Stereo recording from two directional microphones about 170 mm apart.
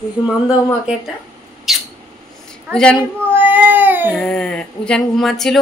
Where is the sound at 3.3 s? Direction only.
10° right (ahead or behind).